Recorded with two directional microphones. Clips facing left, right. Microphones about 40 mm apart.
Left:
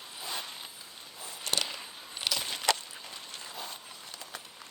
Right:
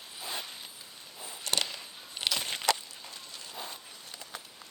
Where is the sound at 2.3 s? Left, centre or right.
Right.